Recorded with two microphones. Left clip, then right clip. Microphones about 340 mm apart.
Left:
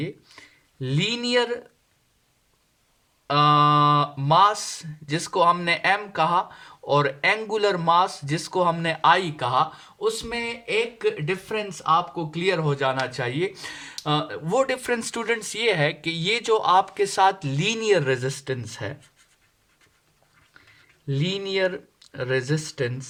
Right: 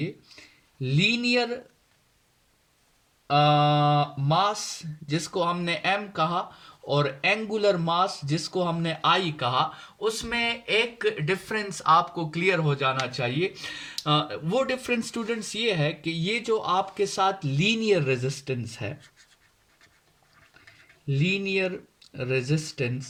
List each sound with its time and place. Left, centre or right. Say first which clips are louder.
0.0 s a sound: left 1 dB; left
3.2 s speech: left 3 dB; left
21.2 s speech: left 2 dB; left